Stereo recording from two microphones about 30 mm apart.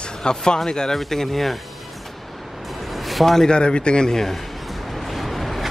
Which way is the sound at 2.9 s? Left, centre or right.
Centre.